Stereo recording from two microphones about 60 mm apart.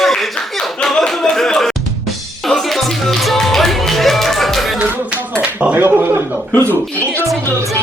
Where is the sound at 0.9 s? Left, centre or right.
Centre.